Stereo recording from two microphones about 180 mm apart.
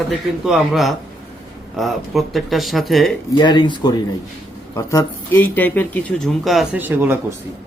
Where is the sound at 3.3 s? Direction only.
25° left (ahead or behind); by 6.0 s 10° left (ahead or behind).